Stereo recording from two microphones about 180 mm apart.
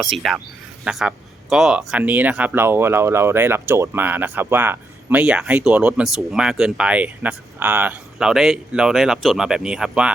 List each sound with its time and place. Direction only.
0.0 s speech: centre (ahead or behind)